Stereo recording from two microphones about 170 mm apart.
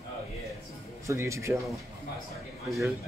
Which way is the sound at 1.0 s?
15° right (ahead or behind).